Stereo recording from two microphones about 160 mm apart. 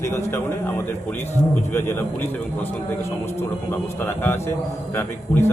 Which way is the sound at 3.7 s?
10° left (ahead or behind).